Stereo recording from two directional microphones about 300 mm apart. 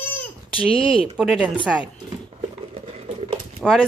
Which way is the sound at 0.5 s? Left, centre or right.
Centre.